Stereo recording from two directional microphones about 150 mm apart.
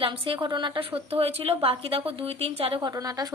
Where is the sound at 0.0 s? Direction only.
35° right (ahead or behind).